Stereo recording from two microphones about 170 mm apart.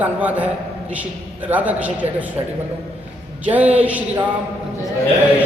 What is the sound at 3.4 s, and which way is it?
Speech, 10° right (ahead or behind).